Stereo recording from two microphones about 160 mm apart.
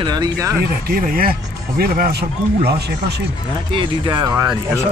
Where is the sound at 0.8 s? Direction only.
65° right (ahead or behind); by 3.2 s 90° right.